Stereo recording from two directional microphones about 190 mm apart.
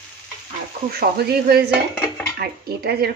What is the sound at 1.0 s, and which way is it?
Speech, 55° right (ahead or behind).